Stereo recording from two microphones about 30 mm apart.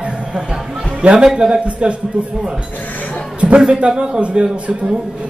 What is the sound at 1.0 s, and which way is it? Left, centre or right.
Speech, right.